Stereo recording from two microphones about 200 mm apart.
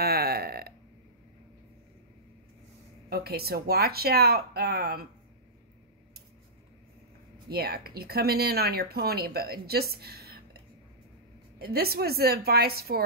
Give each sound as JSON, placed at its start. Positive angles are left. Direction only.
{"t": 0.0, "sound": "burping", "side_deg": -50}
{"t": 3.1, "sound": "speech", "side_deg": -50}
{"t": 7.4, "sound": "speech", "side_deg": -50}